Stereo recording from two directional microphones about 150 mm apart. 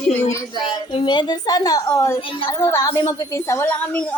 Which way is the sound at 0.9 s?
30° left (ahead or behind).